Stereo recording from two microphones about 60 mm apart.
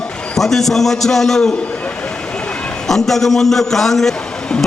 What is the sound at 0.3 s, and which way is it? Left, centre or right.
A man's voice, centre.